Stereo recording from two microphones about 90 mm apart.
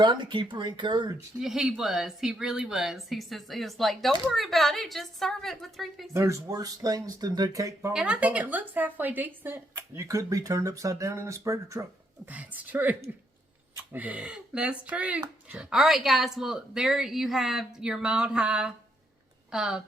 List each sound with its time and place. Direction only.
0.0 s speech: 60° right (ahead or behind)
1.4 s speech: 5° right (ahead or behind)
6.1 s speech: 35° right (ahead or behind)
7.9 s a woman's voice: 15° right (ahead or behind)
9.9 s speech: 35° right (ahead or behind)
12.2 s speech: 15° right (ahead or behind)